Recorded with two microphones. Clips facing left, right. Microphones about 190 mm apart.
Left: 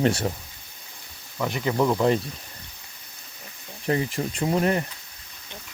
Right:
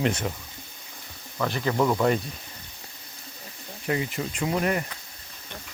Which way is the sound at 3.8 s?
35° left (ahead or behind).